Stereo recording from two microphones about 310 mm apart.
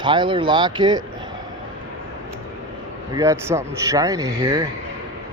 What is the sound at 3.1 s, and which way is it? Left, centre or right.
Speech, centre.